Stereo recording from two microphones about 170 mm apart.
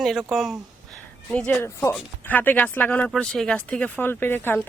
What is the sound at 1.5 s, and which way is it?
Speech, 15° left (ahead or behind).